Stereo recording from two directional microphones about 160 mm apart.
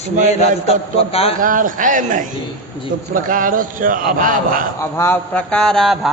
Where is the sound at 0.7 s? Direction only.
35° left (ahead or behind).